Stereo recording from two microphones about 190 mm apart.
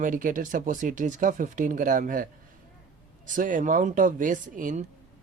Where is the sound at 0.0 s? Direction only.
45° right (ahead or behind).